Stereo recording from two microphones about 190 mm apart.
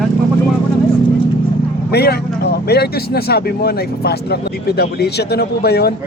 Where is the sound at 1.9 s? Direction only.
55° left (ahead or behind).